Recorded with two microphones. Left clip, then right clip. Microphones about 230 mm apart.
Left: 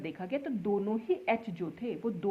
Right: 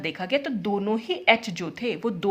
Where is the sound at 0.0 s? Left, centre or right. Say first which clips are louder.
Right 10 dB; right.